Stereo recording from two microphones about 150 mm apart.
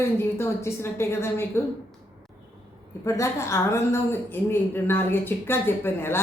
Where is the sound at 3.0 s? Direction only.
20° left (ahead or behind).